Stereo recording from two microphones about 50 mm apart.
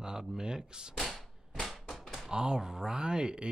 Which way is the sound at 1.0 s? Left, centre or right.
Centre.